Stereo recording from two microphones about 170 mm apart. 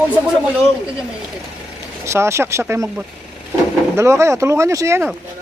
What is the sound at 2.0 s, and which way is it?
Speech, 15° right (ahead or behind).